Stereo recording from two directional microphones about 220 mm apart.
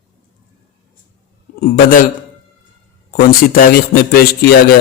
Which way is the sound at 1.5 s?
40° left (ahead or behind).